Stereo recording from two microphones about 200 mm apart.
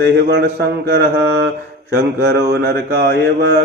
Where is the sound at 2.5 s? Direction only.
55° right (ahead or behind).